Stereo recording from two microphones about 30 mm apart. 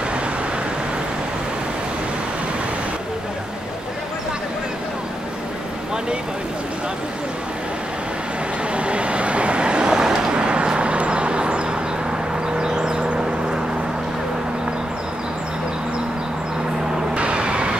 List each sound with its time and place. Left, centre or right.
8.7 s vehicle: right
10.3 s vehicle: right
12.5 s vehicle: right
17.1 s vehicle: right